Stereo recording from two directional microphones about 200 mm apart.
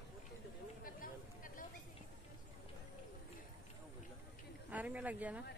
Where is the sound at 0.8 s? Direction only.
45° left (ahead or behind).